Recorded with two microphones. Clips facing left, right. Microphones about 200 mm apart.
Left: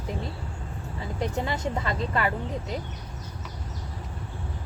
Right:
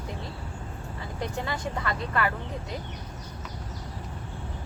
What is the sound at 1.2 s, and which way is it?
A woman's voice, 25° left (ahead or behind).